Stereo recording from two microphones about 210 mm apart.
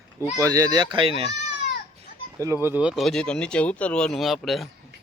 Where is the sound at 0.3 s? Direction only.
15° right (ahead or behind).